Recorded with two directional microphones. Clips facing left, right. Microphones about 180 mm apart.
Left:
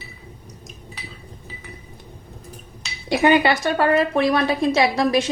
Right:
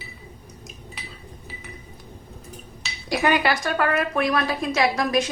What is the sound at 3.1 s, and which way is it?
Speech, 25° left (ahead or behind).